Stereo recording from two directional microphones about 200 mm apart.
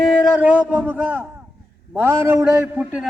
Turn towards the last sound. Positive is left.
turn(degrees=-10)  # may be behind; listen again after turning